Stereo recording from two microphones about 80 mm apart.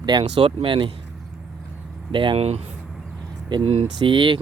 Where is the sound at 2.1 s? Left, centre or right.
Right.